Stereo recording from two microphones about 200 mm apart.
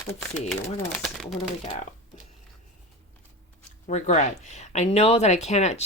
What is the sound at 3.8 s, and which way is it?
Speech, 35° left (ahead or behind).